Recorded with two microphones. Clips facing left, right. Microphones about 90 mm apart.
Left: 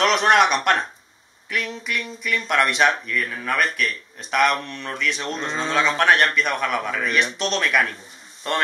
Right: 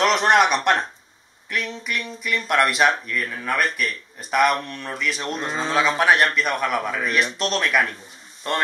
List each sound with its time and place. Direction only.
0.0 s speech: centre (ahead or behind)